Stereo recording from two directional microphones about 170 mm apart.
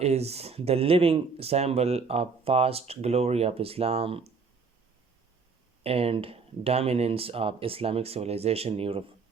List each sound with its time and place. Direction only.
0.0 s speech: 40° right (ahead or behind)
5.8 s speech: 35° right (ahead or behind)